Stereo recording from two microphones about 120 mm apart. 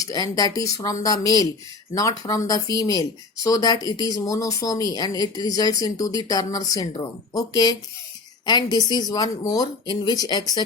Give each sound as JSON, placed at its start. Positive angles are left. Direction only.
{"t": 0.0, "sound": "speech", "side_deg": 30}